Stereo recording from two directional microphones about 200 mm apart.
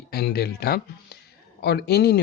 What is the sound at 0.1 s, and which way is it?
Speech, 50° left (ahead or behind).